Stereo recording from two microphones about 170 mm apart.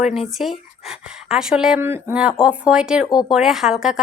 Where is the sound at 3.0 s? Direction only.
20° left (ahead or behind).